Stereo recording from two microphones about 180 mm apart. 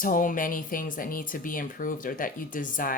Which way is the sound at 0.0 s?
50° left (ahead or behind).